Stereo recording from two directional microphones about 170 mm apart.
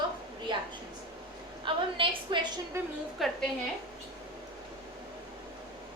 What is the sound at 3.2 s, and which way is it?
Speech, centre (ahead or behind).